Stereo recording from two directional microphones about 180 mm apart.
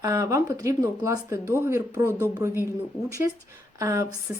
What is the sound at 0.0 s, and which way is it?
Speech, 15° right (ahead or behind).